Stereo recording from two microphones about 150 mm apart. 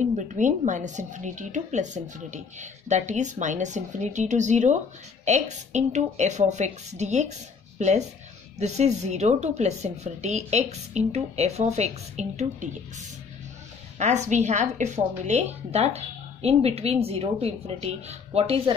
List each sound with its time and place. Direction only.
0.0 s a woman's voice: 55° right (ahead or behind)
13.9 s a woman's voice: 50° right (ahead or behind)